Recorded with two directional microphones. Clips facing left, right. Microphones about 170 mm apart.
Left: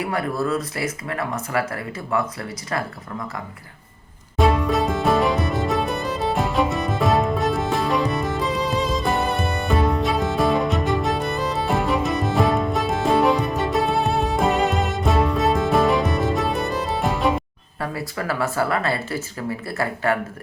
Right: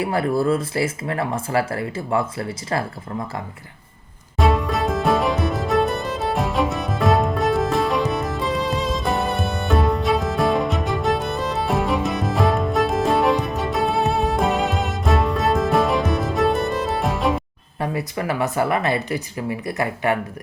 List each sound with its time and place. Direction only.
0.0 s speech: 30° right (ahead or behind)
4.4 s music: centre (ahead or behind)
17.7 s speech: 20° right (ahead or behind)